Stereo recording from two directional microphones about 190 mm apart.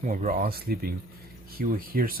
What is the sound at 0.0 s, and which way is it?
Speech, 45° right (ahead or behind).